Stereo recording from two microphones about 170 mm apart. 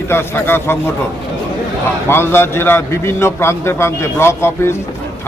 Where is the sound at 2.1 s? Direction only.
15° left (ahead or behind).